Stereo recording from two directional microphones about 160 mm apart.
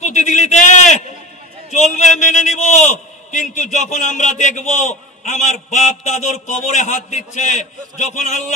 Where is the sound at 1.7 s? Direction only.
50° left (ahead or behind).